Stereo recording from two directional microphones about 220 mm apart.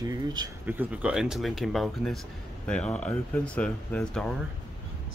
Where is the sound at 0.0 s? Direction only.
15° right (ahead or behind); by 4.4 s 5° left (ahead or behind).